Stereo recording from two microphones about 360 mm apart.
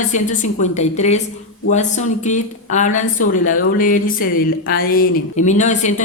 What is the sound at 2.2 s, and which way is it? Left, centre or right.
Speech, centre.